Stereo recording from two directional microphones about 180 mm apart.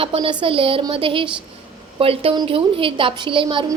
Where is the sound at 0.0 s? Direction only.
30° right (ahead or behind).